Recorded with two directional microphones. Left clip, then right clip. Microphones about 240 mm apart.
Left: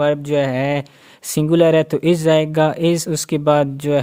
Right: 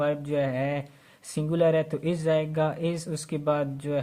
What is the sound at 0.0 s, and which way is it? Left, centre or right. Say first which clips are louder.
Speech: left 10 dB; left.